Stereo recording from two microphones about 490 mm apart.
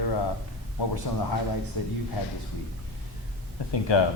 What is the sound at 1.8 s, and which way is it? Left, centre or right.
Speech, left.